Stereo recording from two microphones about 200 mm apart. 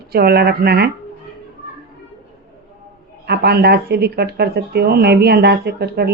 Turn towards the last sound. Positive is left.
turn(degrees=-55)  # may be behind; listen again after turning